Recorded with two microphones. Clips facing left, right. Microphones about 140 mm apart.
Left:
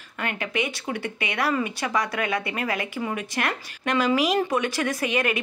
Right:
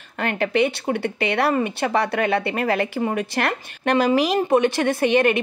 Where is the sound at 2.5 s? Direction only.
55° right (ahead or behind).